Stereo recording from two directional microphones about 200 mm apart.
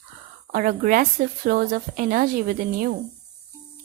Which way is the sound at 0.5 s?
45° right (ahead or behind).